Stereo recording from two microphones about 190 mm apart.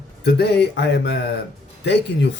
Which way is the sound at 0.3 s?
60° left (ahead or behind).